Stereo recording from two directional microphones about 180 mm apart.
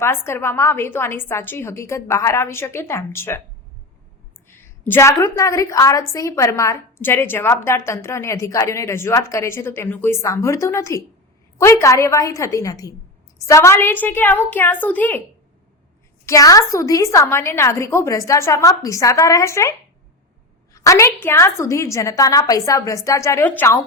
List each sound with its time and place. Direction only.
0.0 s a woman's voice: 15° left (ahead or behind)
4.4 s a woman's voice: 10° left (ahead or behind)
16.2 s a woman's voice: 20° left (ahead or behind)
20.7 s a woman's voice: 15° left (ahead or behind)